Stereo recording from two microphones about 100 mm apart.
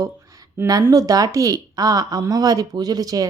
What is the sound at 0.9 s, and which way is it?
Speech, 40° right (ahead or behind).